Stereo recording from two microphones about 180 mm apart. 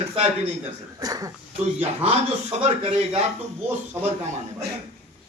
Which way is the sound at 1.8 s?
35° right (ahead or behind).